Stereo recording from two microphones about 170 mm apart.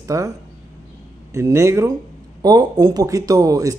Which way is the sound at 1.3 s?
15° right (ahead or behind).